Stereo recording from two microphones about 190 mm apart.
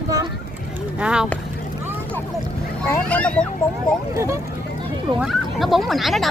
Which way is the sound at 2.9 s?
5° left (ahead or behind).